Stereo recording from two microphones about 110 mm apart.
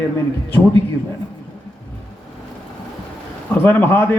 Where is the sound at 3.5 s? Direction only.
20° left (ahead or behind).